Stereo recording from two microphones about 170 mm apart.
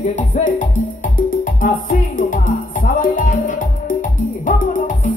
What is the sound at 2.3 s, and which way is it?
Music, 50° left (ahead or behind).